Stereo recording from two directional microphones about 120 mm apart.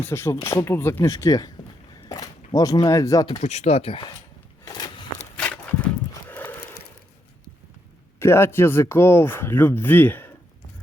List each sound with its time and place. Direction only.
0.0 s speech: 20° left (ahead or behind)
3.4 s speech: 65° left (ahead or behind)
4.7 s walk: 35° left (ahead or behind)
6.2 s a sound: 15° left (ahead or behind)
8.2 s speech: 20° left (ahead or behind)